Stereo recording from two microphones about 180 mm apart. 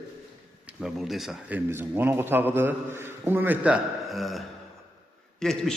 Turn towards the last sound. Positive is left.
turn(degrees=5)  # may be behind; listen again after turning